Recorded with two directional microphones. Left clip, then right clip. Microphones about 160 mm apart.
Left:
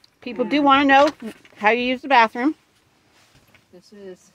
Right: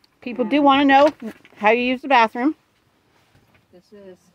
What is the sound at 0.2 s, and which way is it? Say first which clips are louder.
Speech: right 2 dB; 10° right (ahead or behind).